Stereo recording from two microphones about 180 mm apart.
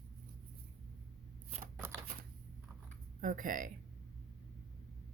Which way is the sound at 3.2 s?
50° right (ahead or behind).